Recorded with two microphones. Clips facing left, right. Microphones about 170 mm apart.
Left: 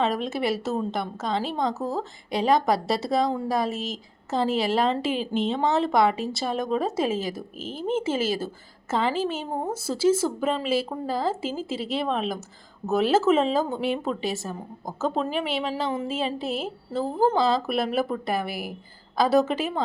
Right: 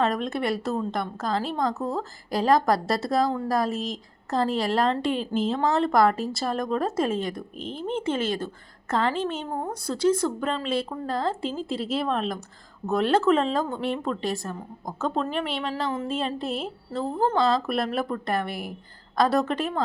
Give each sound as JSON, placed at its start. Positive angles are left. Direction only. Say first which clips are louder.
{"t": 0.0, "sound": "speech", "louder": "even", "side_deg": 5}
{"t": 9.5, "sound": "speech", "louder": "left 2 dB", "side_deg": 20}
{"t": 9.8, "sound": "speech", "louder": "left 1 dB", "side_deg": 5}